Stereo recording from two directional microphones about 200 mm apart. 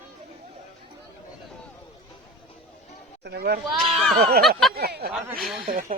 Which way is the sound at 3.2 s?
55° right (ahead or behind).